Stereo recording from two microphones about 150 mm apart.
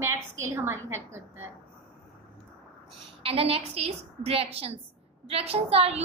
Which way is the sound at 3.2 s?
40° right (ahead or behind).